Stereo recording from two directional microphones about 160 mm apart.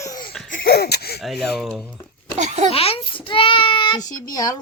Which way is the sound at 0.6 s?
90° left.